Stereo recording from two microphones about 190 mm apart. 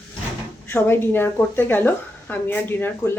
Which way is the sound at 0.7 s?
10° left (ahead or behind).